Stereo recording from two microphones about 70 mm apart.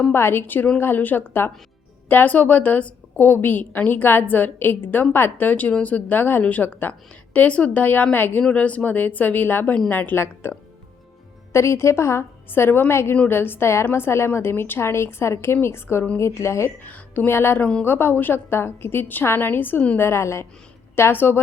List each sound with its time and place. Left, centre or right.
0.1 s a woman's voice: left
11.5 s a woman's voice: left
16.8 s a woman's voice: left
17.6 s a woman's voice: centre
17.8 s a woman's voice: left
20.0 s a woman's voice: left